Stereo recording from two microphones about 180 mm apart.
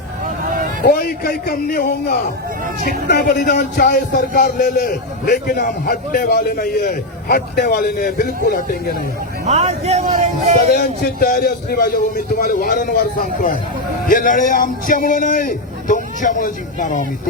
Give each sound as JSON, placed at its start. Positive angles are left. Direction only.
{"t": 0.9, "sound": "speech", "side_deg": 55}
{"t": 9.5, "sound": "speech", "side_deg": -35}
{"t": 10.7, "sound": "a man's voice", "side_deg": 55}